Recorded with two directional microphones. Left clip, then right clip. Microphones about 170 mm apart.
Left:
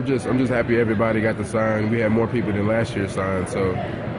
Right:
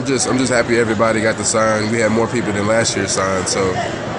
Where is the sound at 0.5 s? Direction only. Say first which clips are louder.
Right 5 dB; centre (ahead or behind).